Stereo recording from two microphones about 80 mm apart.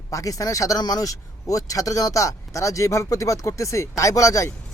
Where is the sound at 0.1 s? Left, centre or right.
Left.